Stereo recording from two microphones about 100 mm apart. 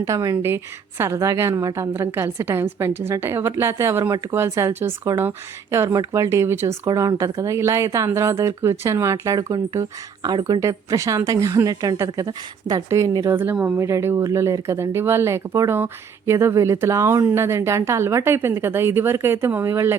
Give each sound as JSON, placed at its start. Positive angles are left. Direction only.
{"t": 0.1, "sound": "speech", "side_deg": -30}
{"t": 6.8, "sound": "speech", "side_deg": -35}
{"t": 10.6, "sound": "speech", "side_deg": -30}
{"t": 12.9, "sound": "speech", "side_deg": -30}